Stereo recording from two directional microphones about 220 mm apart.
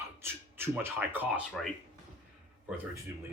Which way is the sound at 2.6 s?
10° right (ahead or behind).